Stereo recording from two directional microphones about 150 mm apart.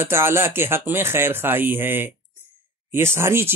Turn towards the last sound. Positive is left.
turn(degrees=-15)  # may be behind; listen again after turning